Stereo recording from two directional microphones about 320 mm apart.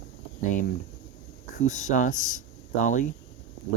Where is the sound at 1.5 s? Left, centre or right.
Left.